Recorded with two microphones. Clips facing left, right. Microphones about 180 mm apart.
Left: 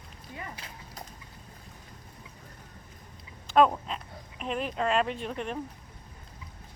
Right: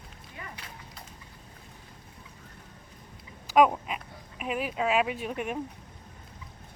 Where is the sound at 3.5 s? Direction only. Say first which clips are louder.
Right 1 dB; 10° right (ahead or behind).